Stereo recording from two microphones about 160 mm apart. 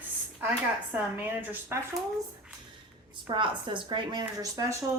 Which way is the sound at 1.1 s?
15° right (ahead or behind).